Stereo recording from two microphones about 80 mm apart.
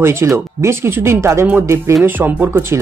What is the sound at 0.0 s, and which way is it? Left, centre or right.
Speech, right.